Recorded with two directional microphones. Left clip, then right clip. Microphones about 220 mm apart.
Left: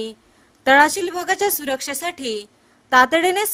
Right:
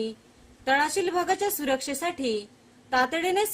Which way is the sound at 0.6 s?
50° left (ahead or behind).